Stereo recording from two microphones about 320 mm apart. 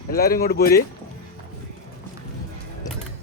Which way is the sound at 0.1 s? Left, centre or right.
Left.